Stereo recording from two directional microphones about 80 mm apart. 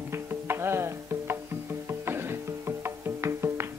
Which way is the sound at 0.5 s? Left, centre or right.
Right.